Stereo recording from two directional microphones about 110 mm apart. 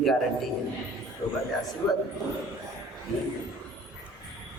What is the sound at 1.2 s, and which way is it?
Speech, 45° left (ahead or behind).